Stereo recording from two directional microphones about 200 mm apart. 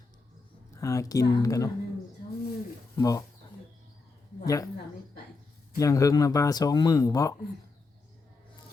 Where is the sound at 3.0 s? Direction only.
15° left (ahead or behind).